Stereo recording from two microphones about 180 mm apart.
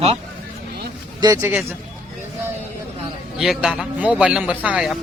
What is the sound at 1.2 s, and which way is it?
Speech, 15° right (ahead or behind).